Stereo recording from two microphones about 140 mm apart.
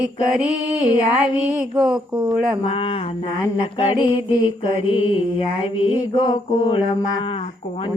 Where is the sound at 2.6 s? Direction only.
40° left (ahead or behind).